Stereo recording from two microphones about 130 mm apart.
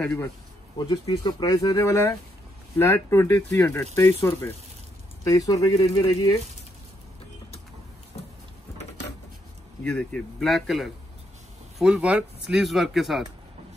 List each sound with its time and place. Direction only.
0.7 s speech: 30° left (ahead or behind)
5.2 s speech: 30° left (ahead or behind)
9.8 s speech: 10° left (ahead or behind)